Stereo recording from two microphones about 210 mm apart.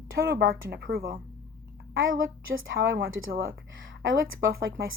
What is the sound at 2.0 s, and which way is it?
A woman's voice, 70° right (ahead or behind).